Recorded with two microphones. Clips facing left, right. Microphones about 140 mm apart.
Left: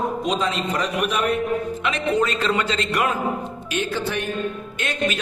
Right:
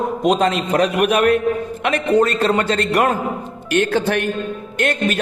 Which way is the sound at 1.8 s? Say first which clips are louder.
Right 8 dB; 50° right (ahead or behind).